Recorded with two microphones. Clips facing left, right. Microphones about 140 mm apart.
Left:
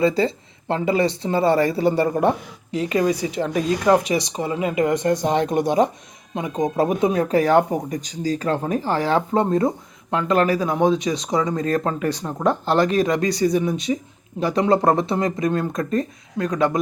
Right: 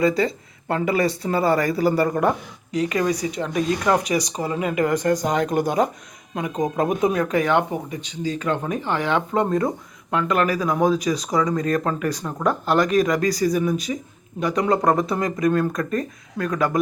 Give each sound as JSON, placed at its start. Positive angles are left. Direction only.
{"t": 0.0, "sound": "speech", "side_deg": 30}